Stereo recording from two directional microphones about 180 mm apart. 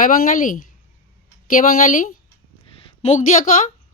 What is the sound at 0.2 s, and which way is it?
Speech, 45° left (ahead or behind).